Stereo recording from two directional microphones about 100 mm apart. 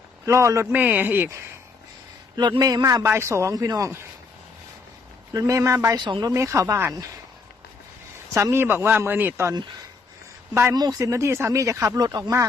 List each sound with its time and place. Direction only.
0.3 s speech: 30° right (ahead or behind)
0.7 s speech: 15° right (ahead or behind)
2.3 s speech: 45° right (ahead or behind)
3.0 s speech: 25° right (ahead or behind)
5.3 s speech: 35° right (ahead or behind)
6.0 s speech: 45° right (ahead or behind)
6.3 s speech: 30° right (ahead or behind)
8.3 s speech: 30° right (ahead or behind)
10.5 s speech: 30° right (ahead or behind)
10.8 s speech: 40° right (ahead or behind)